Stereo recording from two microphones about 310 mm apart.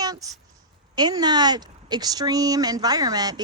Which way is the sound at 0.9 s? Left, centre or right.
Centre.